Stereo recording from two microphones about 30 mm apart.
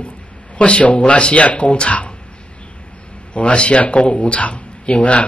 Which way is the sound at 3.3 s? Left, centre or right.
Left.